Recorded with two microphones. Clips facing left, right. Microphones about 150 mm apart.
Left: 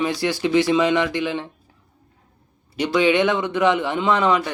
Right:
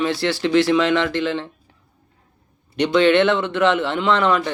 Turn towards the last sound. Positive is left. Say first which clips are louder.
# right 1 dB
turn(degrees=15)  # may be behind; listen again after turning